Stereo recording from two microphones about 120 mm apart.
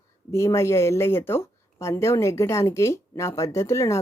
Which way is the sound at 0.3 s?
25° left (ahead or behind).